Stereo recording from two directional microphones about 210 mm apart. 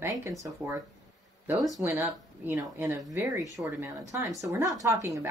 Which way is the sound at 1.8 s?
10° right (ahead or behind).